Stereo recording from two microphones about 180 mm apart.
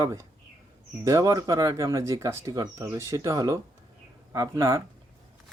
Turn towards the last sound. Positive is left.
turn(degrees=-15)  # may be behind; listen again after turning